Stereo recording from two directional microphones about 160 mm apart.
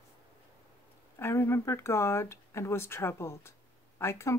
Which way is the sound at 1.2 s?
15° left (ahead or behind).